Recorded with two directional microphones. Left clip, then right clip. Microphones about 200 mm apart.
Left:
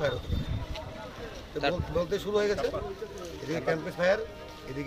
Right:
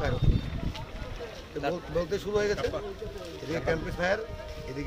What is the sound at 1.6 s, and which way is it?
Speech, centre (ahead or behind).